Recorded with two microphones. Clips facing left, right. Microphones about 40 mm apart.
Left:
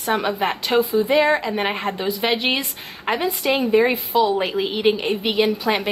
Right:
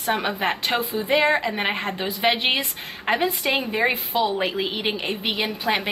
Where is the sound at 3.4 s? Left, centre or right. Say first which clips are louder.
Left 3 dB; centre.